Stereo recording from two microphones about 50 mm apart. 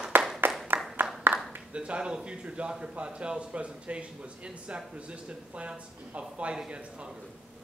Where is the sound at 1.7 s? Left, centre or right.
Right.